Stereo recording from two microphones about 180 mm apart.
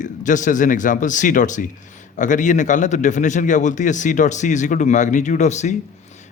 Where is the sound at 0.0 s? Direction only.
45° left (ahead or behind).